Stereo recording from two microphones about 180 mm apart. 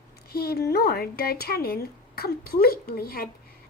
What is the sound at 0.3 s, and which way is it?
Speech, 60° left (ahead or behind).